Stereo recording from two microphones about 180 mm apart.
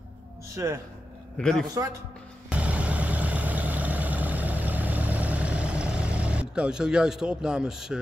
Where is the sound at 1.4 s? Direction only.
5° left (ahead or behind).